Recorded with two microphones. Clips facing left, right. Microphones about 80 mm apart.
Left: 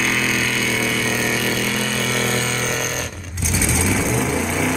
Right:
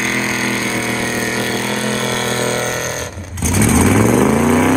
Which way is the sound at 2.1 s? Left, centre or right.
Right.